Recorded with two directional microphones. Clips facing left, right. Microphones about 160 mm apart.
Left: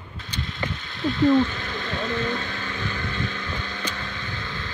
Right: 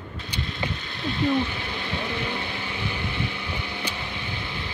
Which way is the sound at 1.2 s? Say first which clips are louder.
Left 5 dB; 10° right (ahead or behind).